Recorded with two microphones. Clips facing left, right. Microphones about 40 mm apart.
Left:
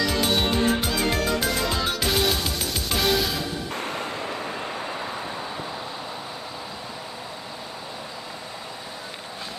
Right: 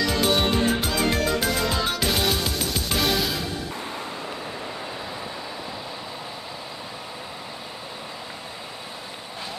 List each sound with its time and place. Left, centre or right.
0.0 s music: centre
3.7 s music: left